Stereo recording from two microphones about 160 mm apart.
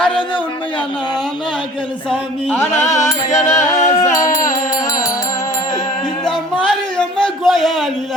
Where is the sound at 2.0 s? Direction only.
10° left (ahead or behind).